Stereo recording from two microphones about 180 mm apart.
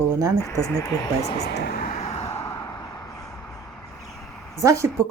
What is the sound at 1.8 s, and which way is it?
Vehicle, 35° left (ahead or behind).